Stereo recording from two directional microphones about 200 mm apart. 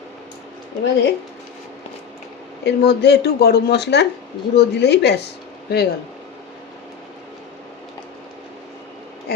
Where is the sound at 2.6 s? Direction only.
55° left (ahead or behind).